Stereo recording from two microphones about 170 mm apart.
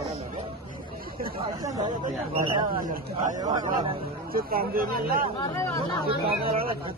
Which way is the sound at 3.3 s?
20° right (ahead or behind).